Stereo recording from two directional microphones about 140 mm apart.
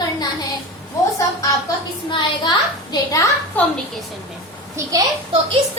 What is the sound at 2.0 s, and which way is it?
A child's voice, 35° left (ahead or behind).